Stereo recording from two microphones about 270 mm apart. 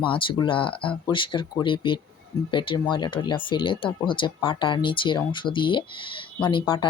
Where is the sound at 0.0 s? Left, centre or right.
Centre.